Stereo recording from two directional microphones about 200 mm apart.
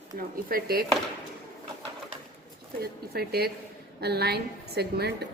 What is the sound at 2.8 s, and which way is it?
A woman's voice, 50° right (ahead or behind).